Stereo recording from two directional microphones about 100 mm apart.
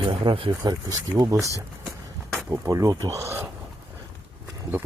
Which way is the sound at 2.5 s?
30° right (ahead or behind).